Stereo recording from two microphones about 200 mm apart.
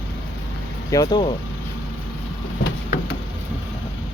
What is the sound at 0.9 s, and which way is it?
Speech, 20° left (ahead or behind).